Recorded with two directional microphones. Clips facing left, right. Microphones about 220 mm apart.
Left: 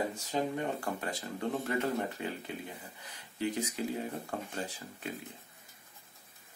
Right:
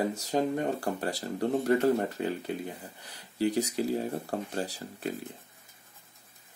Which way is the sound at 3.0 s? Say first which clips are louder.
Right 6 dB; 35° right (ahead or behind).